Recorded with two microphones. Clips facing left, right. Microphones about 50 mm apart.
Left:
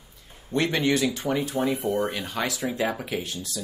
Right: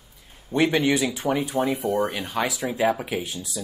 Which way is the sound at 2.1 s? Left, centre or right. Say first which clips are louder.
Right 2 dB; centre.